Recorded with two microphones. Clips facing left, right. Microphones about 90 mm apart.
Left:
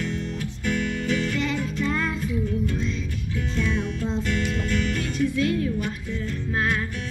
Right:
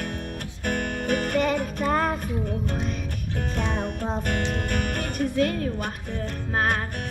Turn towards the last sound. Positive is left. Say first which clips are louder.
# right 1 dB
turn(degrees=-50)  # may be behind; listen again after turning